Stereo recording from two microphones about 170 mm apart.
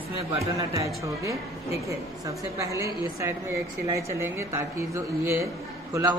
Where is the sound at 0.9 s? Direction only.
20° right (ahead or behind).